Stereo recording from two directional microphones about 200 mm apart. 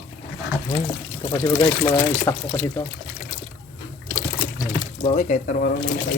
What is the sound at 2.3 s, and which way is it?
Speech, 15° left (ahead or behind).